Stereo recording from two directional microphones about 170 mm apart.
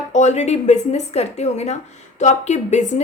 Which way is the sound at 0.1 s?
45° left (ahead or behind).